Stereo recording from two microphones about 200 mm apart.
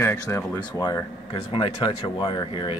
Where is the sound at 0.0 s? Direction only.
15° left (ahead or behind).